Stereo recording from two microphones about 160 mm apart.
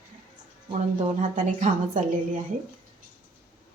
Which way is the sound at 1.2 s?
50° right (ahead or behind).